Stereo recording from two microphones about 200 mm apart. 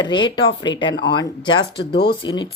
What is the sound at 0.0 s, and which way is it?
Speech, 20° left (ahead or behind).